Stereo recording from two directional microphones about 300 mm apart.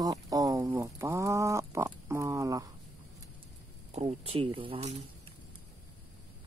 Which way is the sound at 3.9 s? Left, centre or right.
Right.